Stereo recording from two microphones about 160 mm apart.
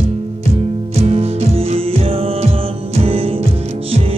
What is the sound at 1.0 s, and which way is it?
Music, 40° right (ahead or behind).